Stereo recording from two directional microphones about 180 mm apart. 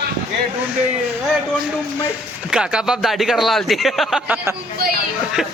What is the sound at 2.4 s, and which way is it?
A man's voice, 5° right (ahead or behind).